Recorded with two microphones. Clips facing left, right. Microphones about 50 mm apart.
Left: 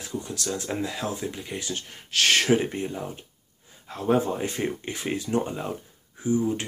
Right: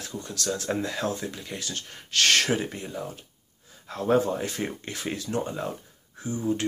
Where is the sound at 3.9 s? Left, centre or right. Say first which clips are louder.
Even; centre.